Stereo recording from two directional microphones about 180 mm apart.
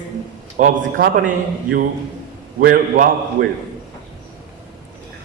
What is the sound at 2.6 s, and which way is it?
Speech, 55° right (ahead or behind).